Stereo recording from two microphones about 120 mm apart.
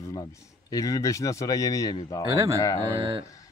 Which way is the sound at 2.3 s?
25° right (ahead or behind).